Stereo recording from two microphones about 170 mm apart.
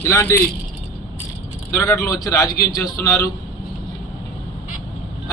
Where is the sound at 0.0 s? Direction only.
15° left (ahead or behind).